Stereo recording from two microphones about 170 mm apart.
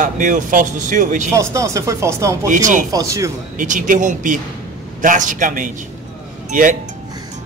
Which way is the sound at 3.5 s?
50° right (ahead or behind).